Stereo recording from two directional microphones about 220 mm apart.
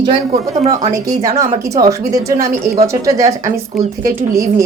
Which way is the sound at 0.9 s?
15° right (ahead or behind).